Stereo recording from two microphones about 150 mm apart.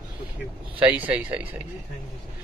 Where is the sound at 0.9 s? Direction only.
10° right (ahead or behind).